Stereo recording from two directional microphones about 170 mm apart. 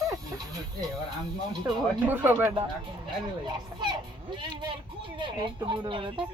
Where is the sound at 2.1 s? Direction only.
15° right (ahead or behind); by 6.2 s 30° right (ahead or behind).